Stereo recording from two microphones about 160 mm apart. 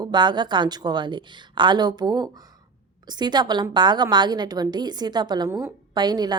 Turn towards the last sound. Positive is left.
turn(degrees=-25)  # may be behind; listen again after turning